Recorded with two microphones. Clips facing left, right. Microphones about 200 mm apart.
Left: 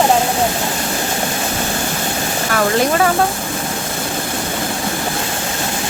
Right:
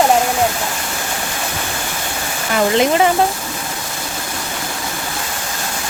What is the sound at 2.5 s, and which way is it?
Speech, 20° right (ahead or behind).